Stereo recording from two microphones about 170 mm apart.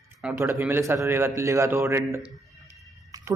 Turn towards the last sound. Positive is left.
turn(degrees=-20)  # may be behind; listen again after turning